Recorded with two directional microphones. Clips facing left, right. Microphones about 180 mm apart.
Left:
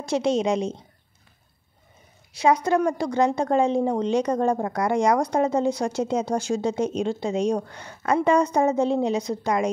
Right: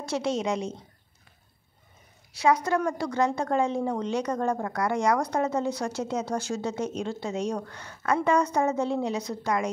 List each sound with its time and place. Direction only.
0.0 s a woman's voice: 20° left (ahead or behind)
2.3 s a woman's voice: 20° left (ahead or behind)